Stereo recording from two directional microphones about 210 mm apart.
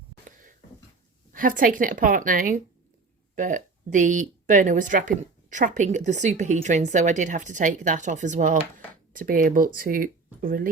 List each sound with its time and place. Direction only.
1.3 s speech: 40° right (ahead or behind)